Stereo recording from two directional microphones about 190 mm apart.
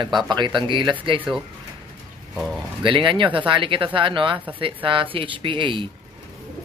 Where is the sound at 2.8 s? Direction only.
25° right (ahead or behind).